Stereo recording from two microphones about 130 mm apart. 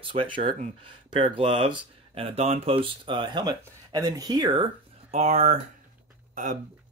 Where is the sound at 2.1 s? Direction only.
50° right (ahead or behind).